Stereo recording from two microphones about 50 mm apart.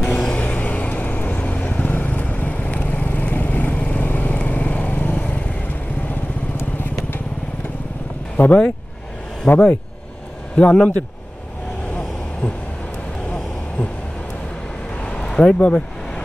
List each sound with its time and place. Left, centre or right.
0.0 s vehicle: left
8.4 s speech: left
9.5 s speech: left
15.0 s a sound: left
15.3 s speech: left